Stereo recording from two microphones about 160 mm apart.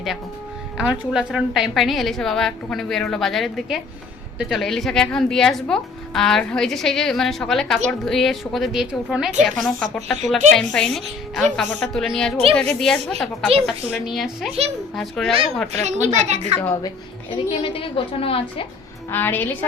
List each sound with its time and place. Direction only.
0.8 s speech: 5° right (ahead or behind)
15.8 s speech: 45° right (ahead or behind)
17.3 s a woman's voice: 35° left (ahead or behind)
19.1 s a woman's voice: 10° left (ahead or behind)